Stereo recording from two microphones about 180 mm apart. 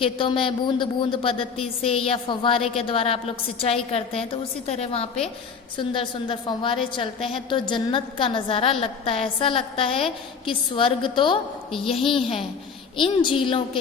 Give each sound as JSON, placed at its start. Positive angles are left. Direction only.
{"t": 0.0, "sound": "a woman's voice", "side_deg": 30}